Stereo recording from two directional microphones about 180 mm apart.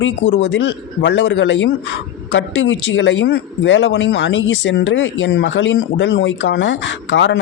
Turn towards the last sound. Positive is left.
turn(degrees=90)